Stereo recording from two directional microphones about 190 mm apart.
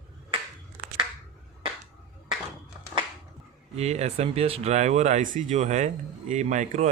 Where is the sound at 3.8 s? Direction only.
35° right (ahead or behind).